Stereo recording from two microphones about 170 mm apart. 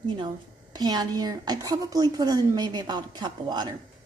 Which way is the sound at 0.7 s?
25° right (ahead or behind).